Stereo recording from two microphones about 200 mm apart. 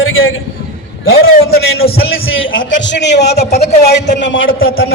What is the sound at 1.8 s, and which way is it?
Speech, 50° left (ahead or behind).